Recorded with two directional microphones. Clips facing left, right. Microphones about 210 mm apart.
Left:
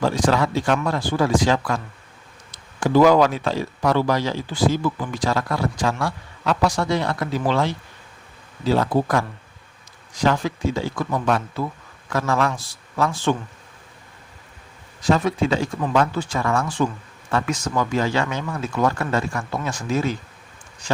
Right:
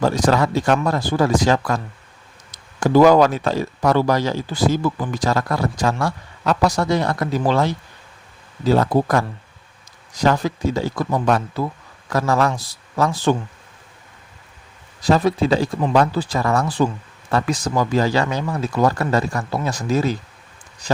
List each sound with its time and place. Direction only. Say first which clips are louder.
0.0 s speech: right 2 dB; 40° right (ahead or behind)
15.0 s speech: right 3 dB; 35° right (ahead or behind)